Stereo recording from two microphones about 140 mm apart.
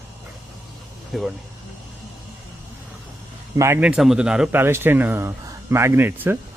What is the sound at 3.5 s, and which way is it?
Speech, 20° right (ahead or behind).